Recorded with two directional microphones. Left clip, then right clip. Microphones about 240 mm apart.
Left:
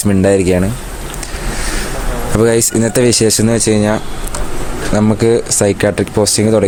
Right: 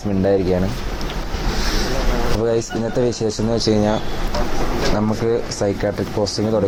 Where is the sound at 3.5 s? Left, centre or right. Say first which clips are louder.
Left 5 dB; left.